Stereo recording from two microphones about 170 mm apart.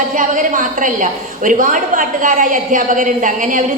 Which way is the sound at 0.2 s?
50° right (ahead or behind).